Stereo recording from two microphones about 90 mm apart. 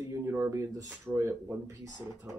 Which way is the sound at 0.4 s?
35° right (ahead or behind).